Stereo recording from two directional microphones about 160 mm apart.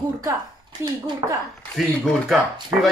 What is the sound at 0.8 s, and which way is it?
Speech, 15° right (ahead or behind).